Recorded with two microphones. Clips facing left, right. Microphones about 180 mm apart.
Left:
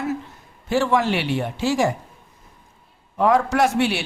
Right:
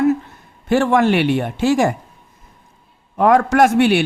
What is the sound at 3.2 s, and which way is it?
Speech, 60° right (ahead or behind).